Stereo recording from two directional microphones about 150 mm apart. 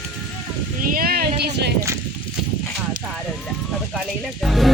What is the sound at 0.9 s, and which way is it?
Speech, 80° right.